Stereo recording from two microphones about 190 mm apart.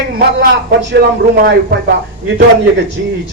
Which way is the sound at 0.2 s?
60° right (ahead or behind).